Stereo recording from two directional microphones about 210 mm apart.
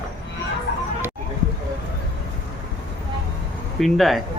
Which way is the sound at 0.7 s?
55° left (ahead or behind).